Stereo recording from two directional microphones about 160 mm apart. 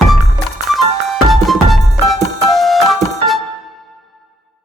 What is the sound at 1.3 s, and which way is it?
Music, centre (ahead or behind).